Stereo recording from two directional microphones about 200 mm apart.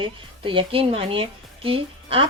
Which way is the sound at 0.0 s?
25° right (ahead or behind).